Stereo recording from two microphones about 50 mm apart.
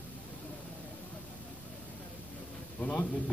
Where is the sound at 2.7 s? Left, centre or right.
Left.